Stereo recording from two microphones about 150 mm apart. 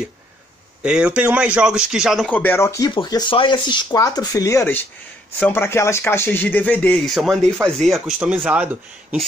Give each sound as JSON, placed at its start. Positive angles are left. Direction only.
{"t": 0.8, "sound": "speech", "side_deg": -10}
{"t": 2.2, "sound": "speech", "side_deg": 10}
{"t": 2.9, "sound": "speech", "side_deg": 30}